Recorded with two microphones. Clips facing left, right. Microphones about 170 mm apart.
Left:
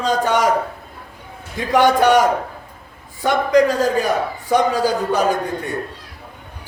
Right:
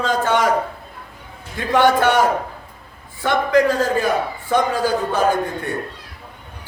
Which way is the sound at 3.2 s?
15° left (ahead or behind).